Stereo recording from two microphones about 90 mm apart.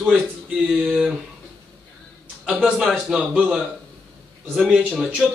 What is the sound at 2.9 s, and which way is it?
Speech, 15° right (ahead or behind).